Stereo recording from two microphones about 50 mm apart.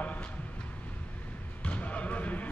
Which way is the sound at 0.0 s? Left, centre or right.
Left.